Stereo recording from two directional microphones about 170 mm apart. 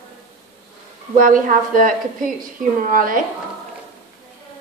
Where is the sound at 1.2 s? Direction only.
50° right (ahead or behind).